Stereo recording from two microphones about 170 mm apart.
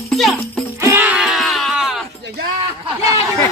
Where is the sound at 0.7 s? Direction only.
10° right (ahead or behind).